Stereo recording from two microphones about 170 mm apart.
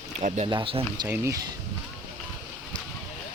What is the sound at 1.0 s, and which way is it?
Speech, 15° right (ahead or behind).